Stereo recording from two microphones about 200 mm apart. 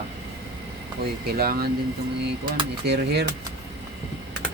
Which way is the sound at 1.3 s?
50° right (ahead or behind).